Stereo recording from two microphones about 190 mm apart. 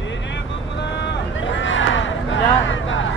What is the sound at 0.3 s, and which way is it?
Vehicle, 65° left (ahead or behind).